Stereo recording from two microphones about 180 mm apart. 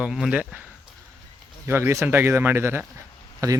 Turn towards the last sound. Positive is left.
turn(degrees=-20)  # may be behind; listen again after turning